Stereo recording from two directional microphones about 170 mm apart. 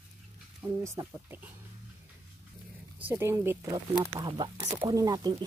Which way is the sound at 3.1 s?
15° right (ahead or behind).